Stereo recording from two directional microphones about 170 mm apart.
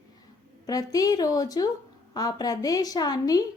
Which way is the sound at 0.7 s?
20° left (ahead or behind).